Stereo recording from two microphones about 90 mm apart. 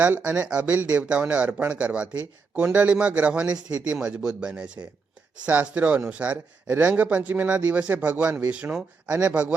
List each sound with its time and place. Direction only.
0.0 s speech: 20° right (ahead or behind)